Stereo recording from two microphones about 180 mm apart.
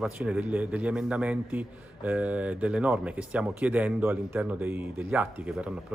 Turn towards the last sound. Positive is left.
turn(degrees=-5)  # may be behind; listen again after turning